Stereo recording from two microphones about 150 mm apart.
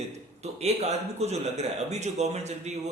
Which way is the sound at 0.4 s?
45° right (ahead or behind).